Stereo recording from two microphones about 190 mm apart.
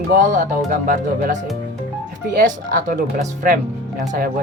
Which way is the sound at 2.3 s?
45° right (ahead or behind).